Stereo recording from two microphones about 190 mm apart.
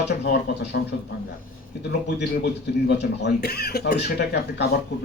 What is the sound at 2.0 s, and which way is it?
Speech, 65° left (ahead or behind).